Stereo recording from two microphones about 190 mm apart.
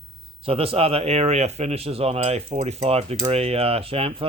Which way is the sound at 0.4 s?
30° right (ahead or behind).